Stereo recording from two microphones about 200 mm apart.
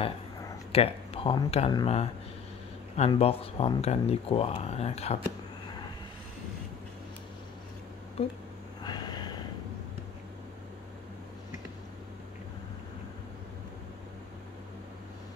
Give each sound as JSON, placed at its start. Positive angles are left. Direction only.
{"t": 0.7, "sound": "speech", "side_deg": 30}
{"t": 3.1, "sound": "speech", "side_deg": 30}
{"t": 8.2, "sound": "a sound", "side_deg": 30}